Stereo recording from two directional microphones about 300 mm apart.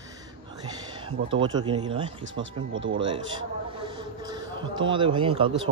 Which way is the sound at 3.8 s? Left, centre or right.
Centre.